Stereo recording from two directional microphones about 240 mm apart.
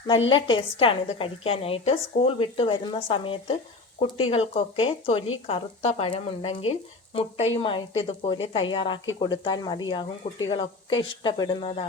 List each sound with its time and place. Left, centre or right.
0.3 s speech: left